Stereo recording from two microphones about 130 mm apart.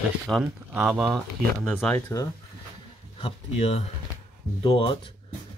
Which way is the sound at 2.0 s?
25° left (ahead or behind).